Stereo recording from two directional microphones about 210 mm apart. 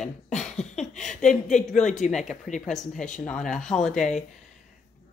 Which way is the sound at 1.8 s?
35° left (ahead or behind).